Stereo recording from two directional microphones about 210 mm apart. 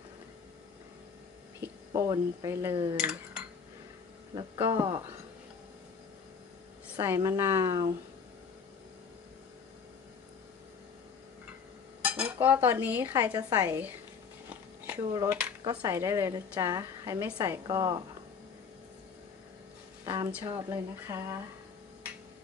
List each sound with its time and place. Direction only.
1.6 s speech: 15° right (ahead or behind)
2.7 s speech: 25° right (ahead or behind)
3.0 s dishes: 5° right (ahead or behind)
4.4 s a woman's voice: 15° right (ahead or behind)
7.0 s a woman's voice: 15° right (ahead or behind)
12.0 s cutlery: 5° right (ahead or behind)
13.3 s a woman's voice: 15° right (ahead or behind)
20.2 s a woman's voice: 10° right (ahead or behind)